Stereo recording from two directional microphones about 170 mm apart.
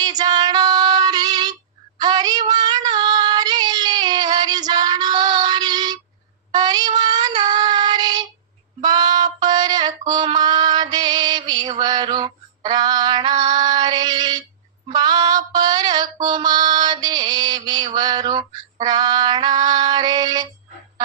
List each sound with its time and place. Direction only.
0.0 s female singing: 25° right (ahead or behind)
2.0 s child singing: 25° right (ahead or behind)
8.8 s music: 25° right (ahead or behind)
9.4 s female singing: 25° right (ahead or behind)